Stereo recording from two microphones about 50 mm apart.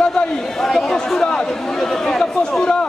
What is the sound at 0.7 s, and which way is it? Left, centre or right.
A man's voice, centre.